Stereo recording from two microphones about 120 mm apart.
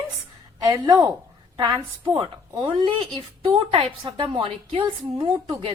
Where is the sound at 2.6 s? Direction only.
45° right (ahead or behind).